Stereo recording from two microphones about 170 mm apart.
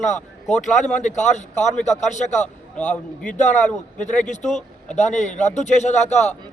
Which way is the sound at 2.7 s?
5° left (ahead or behind).